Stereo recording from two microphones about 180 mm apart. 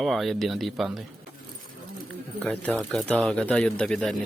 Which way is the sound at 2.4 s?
5° left (ahead or behind).